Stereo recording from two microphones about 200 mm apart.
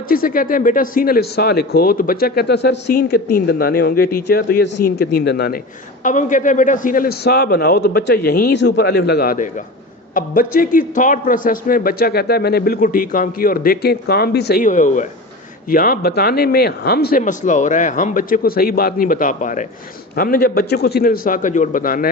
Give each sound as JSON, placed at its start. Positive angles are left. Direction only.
{"t": 0.1, "sound": "speech", "side_deg": 45}
{"t": 6.0, "sound": "speech", "side_deg": 40}